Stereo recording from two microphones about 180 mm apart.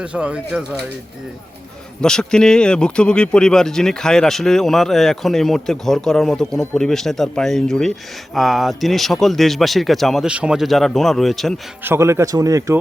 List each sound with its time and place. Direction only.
0.0 s speech: 5° right (ahead or behind)
2.0 s speech: 5° left (ahead or behind)
11.8 s speech: 15° right (ahead or behind)